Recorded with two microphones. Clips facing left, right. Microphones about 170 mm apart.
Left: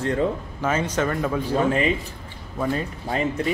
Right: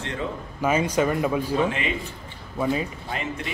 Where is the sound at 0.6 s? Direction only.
10° right (ahead or behind).